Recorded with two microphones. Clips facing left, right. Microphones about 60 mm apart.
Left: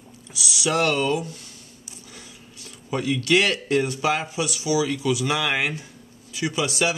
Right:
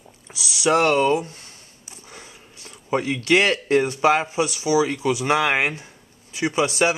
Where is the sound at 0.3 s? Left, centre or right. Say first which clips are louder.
Right 5 dB; right.